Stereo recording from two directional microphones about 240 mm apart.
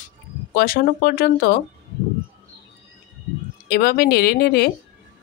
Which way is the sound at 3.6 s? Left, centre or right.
Left.